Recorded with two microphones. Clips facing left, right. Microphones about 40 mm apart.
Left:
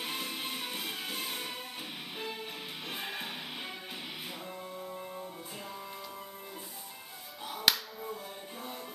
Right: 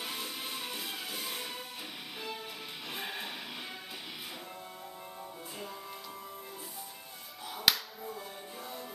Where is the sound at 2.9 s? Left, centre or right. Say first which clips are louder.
Even; centre.